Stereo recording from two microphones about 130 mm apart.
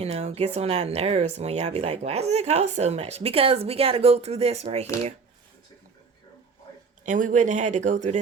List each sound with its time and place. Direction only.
0.0 s speech: 50° right (ahead or behind)
7.0 s speech: 80° right